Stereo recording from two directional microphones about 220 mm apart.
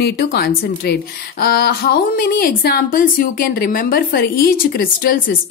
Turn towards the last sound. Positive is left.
turn(degrees=40)  # may be behind; listen again after turning